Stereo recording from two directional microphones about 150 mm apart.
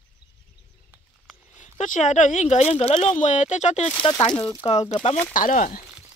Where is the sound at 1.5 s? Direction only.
55° left (ahead or behind).